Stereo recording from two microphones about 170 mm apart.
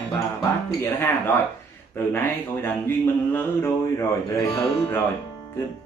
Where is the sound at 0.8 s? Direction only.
10° left (ahead or behind).